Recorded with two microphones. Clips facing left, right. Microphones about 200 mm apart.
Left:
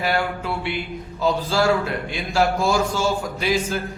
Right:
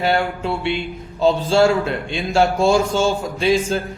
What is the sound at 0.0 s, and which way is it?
Music, 25° right (ahead or behind).